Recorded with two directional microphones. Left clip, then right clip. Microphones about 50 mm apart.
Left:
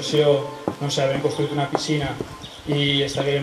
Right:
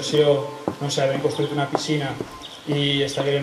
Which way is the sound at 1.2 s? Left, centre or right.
Right.